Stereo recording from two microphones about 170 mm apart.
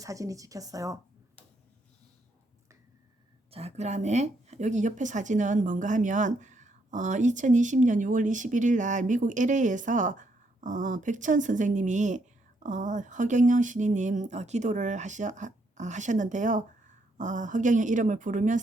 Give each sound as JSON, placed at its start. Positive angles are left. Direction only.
{"t": 0.0, "sound": "speech", "side_deg": -20}
{"t": 3.5, "sound": "speech", "side_deg": -40}